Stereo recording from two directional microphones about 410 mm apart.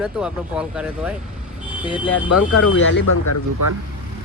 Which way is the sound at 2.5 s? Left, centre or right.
Left.